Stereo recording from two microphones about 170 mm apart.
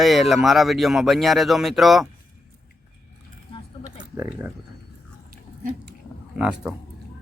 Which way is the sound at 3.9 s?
10° right (ahead or behind).